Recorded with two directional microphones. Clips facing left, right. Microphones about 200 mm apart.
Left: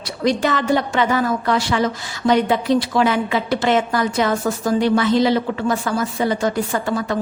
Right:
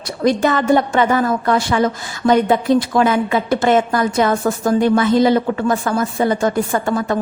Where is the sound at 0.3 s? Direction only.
50° right (ahead or behind).